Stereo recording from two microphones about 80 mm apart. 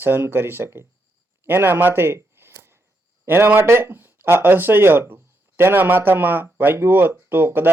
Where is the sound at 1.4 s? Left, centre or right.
Right.